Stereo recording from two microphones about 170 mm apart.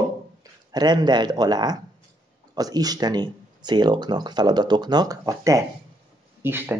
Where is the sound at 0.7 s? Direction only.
25° right (ahead or behind).